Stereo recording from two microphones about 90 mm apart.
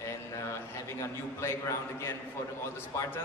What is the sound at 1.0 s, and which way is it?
Speech, 30° left (ahead or behind).